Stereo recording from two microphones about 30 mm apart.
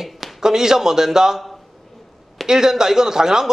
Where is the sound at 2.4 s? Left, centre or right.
Centre.